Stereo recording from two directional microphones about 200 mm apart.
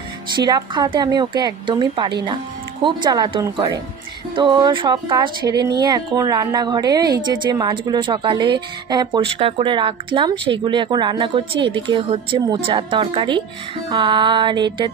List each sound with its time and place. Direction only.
0.4 s a woman's voice: 20° right (ahead or behind)